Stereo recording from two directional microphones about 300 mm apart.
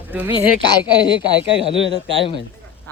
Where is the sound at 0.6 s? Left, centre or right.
Centre.